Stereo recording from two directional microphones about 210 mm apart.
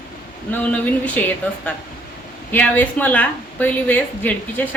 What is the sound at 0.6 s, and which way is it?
Speech, 5° left (ahead or behind).